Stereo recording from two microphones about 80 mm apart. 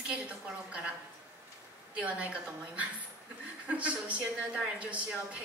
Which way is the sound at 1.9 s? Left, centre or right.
Centre.